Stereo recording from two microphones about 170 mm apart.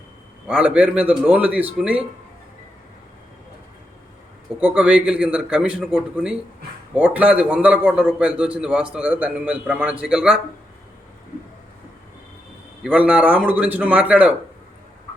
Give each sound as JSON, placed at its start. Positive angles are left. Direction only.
{"t": 0.4, "sound": "a man's voice", "side_deg": -5}
{"t": 4.6, "sound": "a man's voice", "side_deg": -10}
{"t": 12.8, "sound": "a man's voice", "side_deg": -5}